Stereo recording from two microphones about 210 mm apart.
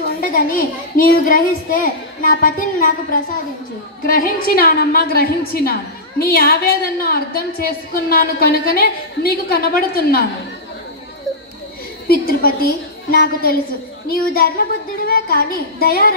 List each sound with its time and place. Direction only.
0.2 s a child's voice: 40° left (ahead or behind)
12.1 s a woman's voice: 45° left (ahead or behind)